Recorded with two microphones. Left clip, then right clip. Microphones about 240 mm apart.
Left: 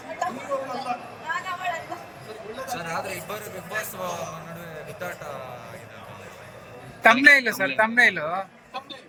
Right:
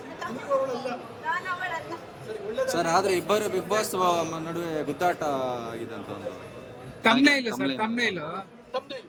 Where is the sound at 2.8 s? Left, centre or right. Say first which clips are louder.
Right 9 dB; right.